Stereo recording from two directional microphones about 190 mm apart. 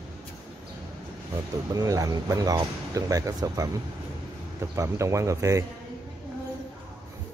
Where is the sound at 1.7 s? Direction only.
20° right (ahead or behind).